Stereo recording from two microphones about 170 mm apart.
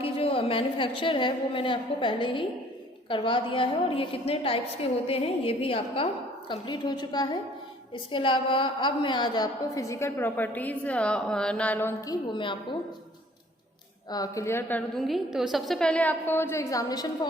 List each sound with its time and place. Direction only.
0.0 s a woman's voice: 35° left (ahead or behind)
14.1 s a woman's voice: 20° left (ahead or behind)